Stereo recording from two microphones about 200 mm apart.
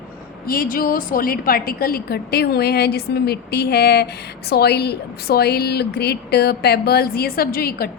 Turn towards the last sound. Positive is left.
turn(degrees=50)  # may be behind; listen again after turning